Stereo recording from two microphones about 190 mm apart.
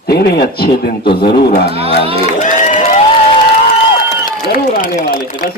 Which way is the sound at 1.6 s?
30° right (ahead or behind).